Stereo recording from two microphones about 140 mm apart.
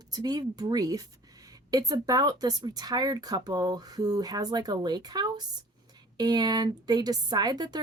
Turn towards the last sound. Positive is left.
turn(degrees=-30)  # may be behind; listen again after turning